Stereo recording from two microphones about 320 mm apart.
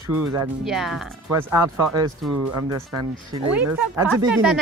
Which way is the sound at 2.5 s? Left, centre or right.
Right.